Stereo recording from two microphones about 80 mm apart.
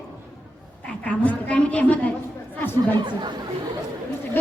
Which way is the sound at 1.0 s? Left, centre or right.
Centre.